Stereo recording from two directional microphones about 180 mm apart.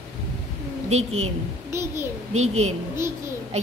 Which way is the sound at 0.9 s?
35° right (ahead or behind).